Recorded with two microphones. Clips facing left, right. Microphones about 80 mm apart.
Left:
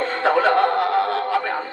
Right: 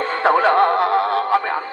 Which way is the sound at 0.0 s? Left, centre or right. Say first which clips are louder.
Right 2 dB; right.